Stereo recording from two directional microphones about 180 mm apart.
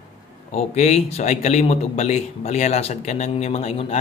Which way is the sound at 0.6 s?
35° left (ahead or behind).